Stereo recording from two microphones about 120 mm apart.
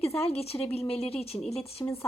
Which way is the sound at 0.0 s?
55° left (ahead or behind).